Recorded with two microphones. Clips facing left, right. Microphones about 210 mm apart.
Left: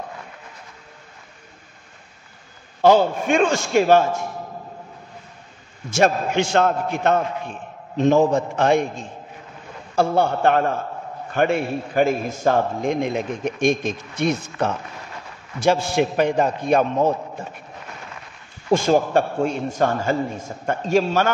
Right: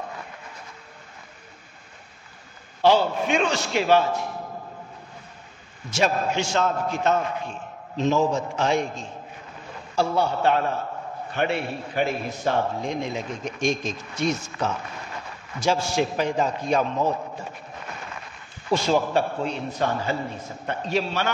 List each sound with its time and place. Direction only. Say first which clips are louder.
2.8 s a man's voice: left 4 dB; 50° left (ahead or behind)
5.9 s a man's voice: left 4 dB; 50° left (ahead or behind)
18.7 s a man's voice: left 4 dB; 50° left (ahead or behind)